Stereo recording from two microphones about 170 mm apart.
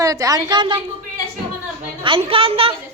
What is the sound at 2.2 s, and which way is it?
Speech, 35° right (ahead or behind).